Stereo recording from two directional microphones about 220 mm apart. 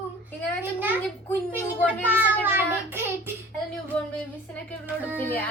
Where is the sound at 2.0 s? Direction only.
10° right (ahead or behind).